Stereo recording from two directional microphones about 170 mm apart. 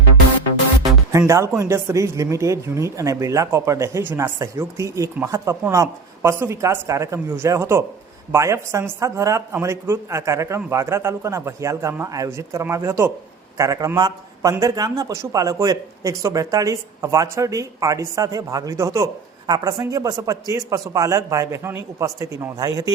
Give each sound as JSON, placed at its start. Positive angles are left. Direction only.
{"t": 1.3, "sound": "speech", "side_deg": -20}